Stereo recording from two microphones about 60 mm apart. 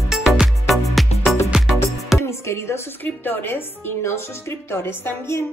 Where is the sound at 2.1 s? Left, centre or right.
Left.